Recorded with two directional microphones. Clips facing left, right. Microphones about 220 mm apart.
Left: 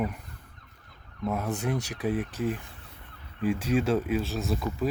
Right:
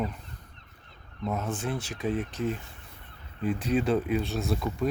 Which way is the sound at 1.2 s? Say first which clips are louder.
Left 2 dB; 10° left (ahead or behind).